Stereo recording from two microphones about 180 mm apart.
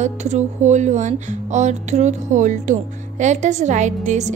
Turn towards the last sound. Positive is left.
turn(degrees=-40)  # may be behind; listen again after turning